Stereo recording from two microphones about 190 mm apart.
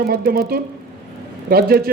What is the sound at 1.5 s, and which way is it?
Speech, 55° right (ahead or behind).